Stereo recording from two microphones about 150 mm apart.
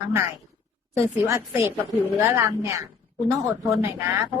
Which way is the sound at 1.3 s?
20° right (ahead or behind).